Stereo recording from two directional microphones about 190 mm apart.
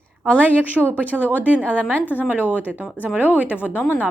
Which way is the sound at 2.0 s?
10° left (ahead or behind).